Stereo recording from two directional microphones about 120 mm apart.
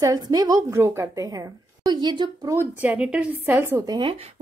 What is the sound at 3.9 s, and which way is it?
Speech, 40° right (ahead or behind).